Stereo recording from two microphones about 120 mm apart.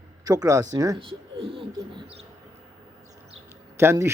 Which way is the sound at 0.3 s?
30° right (ahead or behind).